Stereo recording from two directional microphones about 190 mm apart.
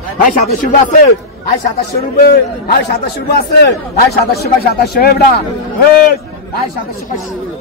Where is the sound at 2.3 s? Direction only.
60° left (ahead or behind).